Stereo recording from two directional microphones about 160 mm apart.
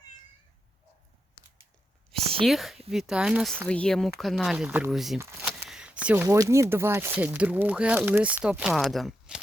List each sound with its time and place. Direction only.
2.4 s speech: centre (ahead or behind)
5.2 s speech: 15° right (ahead or behind)
5.6 s a sound: 5° right (ahead or behind)
6.2 s speech: 20° right (ahead or behind); by 9.4 s 5° right (ahead or behind)